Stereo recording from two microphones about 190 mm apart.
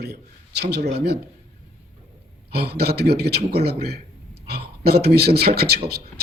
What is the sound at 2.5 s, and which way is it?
A man's voice, 55° right (ahead or behind).